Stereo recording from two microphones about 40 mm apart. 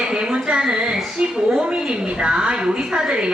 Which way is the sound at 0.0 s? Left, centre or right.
Centre.